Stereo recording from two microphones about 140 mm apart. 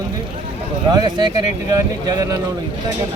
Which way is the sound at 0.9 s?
30° right (ahead or behind).